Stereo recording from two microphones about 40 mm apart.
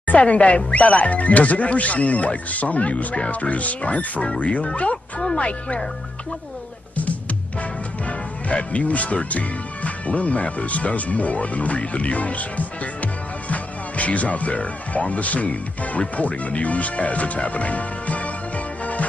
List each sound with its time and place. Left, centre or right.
0.0 s speech: left
8.5 s speech: left